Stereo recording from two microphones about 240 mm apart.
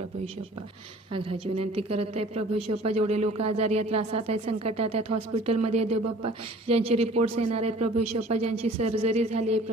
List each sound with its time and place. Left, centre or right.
1.4 s a woman's voice: right
1.8 s speech: right